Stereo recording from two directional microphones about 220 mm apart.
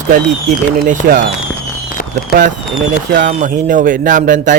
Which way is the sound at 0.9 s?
35° right (ahead or behind).